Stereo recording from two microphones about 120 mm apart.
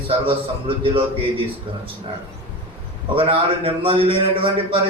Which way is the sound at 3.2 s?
50° right (ahead or behind).